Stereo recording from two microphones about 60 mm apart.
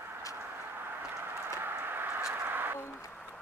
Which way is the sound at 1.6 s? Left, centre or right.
Right.